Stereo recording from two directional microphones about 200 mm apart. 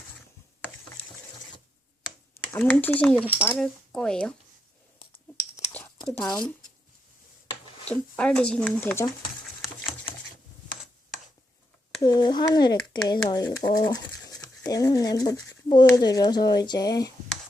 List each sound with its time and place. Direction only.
2.6 s speech: 5° left (ahead or behind)
3.2 s speech: 5° right (ahead or behind)
5.7 s a sound: 5° left (ahead or behind)
6.2 s speech: 20° left (ahead or behind)
7.9 s speech: 5° left (ahead or behind)
12.0 s speech: 20° left (ahead or behind)